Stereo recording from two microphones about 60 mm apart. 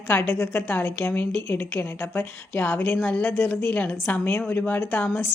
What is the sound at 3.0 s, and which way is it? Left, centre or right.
A woman's voice, left.